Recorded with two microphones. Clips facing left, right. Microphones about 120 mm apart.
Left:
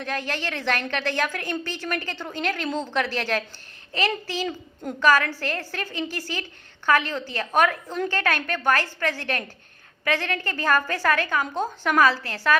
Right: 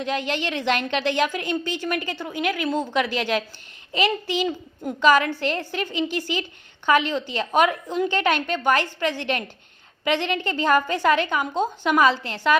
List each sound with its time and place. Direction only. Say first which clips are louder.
0.0 s a woman's voice: right 4 dB; 15° right (ahead or behind)